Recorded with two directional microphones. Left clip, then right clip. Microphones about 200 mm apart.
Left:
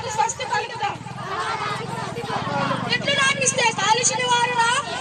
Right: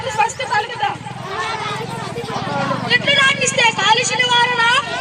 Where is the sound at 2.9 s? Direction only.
40° right (ahead or behind).